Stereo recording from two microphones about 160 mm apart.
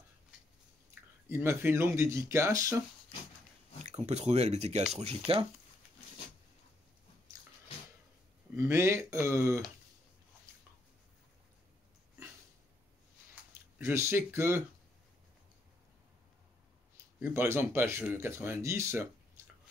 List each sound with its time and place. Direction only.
1.3 s speech: 15° right (ahead or behind)
4.0 s speech: 45° right (ahead or behind)
8.5 s speech: 15° right (ahead or behind)
13.7 s speech: 15° right (ahead or behind)
17.2 s speech: 15° right (ahead or behind)